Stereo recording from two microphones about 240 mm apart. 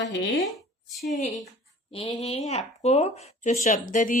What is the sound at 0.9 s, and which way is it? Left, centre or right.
Speech, centre.